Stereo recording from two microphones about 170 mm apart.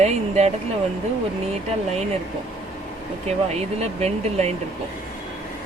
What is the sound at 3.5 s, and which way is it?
Speech, 40° right (ahead or behind).